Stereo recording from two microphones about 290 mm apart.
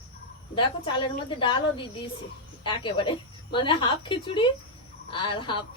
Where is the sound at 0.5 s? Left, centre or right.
Centre.